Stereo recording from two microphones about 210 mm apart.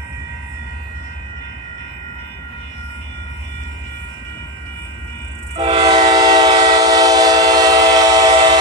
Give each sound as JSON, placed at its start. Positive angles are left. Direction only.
{"t": 5.6, "sound": "train", "side_deg": -25}